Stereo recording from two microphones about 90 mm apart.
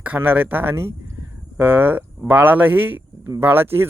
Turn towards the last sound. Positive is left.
turn(degrees=-25)  # may be behind; listen again after turning